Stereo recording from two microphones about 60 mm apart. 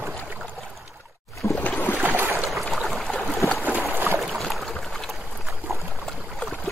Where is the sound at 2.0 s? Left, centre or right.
Right.